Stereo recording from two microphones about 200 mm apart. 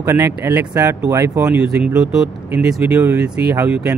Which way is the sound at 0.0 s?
15° right (ahead or behind).